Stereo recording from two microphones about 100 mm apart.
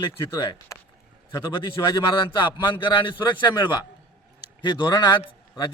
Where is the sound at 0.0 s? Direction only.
50° left (ahead or behind).